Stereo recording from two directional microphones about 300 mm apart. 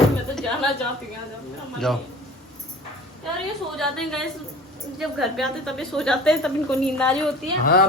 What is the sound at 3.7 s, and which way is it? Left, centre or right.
Speech, centre.